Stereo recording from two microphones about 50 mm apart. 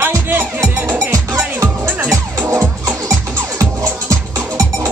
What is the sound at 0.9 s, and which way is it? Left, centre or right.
Music, right.